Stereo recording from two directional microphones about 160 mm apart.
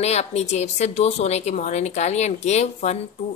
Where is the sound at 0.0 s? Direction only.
40° left (ahead or behind).